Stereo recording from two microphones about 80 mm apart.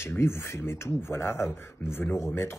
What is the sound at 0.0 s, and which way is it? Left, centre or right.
Speech, left.